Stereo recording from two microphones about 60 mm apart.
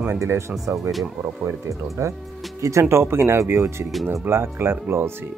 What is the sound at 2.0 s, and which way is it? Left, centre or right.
Speech, right.